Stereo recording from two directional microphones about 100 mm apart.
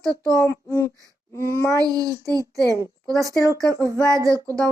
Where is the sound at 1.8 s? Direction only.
40° right (ahead or behind).